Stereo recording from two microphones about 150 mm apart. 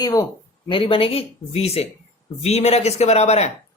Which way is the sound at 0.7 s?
35° left (ahead or behind).